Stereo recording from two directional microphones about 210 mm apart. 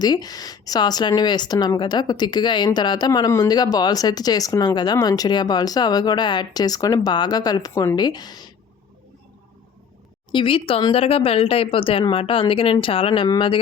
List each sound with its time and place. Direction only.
0.0 s speech: 20° left (ahead or behind)
10.3 s speech: 25° left (ahead or behind)